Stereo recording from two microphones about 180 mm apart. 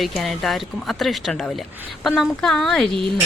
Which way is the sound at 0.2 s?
Centre (ahead or behind).